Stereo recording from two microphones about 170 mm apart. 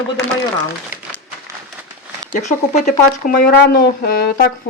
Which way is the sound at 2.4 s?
45° left (ahead or behind).